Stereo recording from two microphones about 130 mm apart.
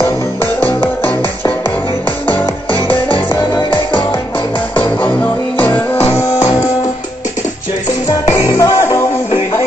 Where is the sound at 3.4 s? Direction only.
35° left (ahead or behind).